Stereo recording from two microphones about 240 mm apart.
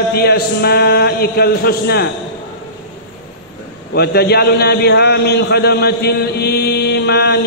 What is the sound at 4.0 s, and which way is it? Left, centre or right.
A man's voice, left.